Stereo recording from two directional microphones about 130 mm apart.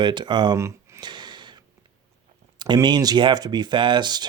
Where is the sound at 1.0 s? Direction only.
35° right (ahead or behind).